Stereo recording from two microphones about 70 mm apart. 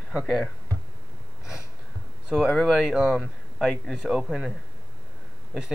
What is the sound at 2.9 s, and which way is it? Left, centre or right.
Speech, centre.